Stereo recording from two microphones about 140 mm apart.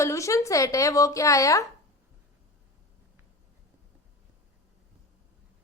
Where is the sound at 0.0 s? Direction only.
20° left (ahead or behind).